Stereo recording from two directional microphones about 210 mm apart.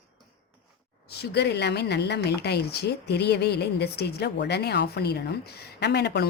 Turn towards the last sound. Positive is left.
turn(degrees=55)  # may be behind; listen again after turning